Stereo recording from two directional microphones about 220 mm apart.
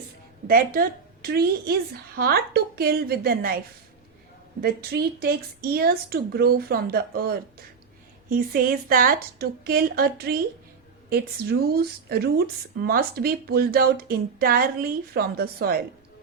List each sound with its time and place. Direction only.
0.4 s a woman's voice: 40° right (ahead or behind)
4.6 s speech: 45° right (ahead or behind)
11.6 s speech: 45° right (ahead or behind)